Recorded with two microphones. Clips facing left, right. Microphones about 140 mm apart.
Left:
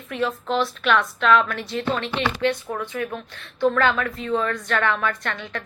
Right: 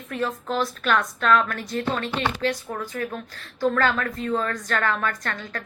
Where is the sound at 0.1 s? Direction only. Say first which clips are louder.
Left 3 dB; 40° right (ahead or behind).